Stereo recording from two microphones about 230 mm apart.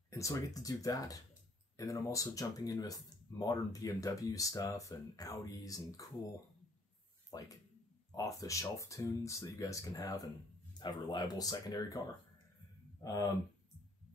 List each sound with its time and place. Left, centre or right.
0.1 s speech: centre
7.2 s speech: centre
13.0 s speech: centre